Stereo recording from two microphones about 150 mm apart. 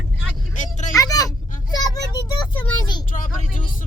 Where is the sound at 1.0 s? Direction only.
25° left (ahead or behind).